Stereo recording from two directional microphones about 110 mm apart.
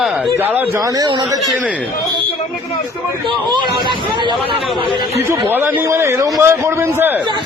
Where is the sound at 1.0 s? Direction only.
45° right (ahead or behind).